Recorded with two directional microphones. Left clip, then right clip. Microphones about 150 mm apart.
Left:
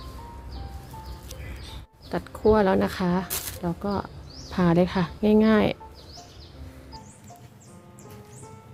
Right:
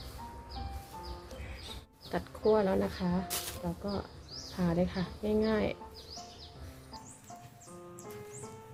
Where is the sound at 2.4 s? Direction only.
50° left (ahead or behind).